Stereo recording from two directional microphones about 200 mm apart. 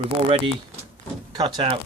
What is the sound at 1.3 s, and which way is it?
Speech, 25° right (ahead or behind).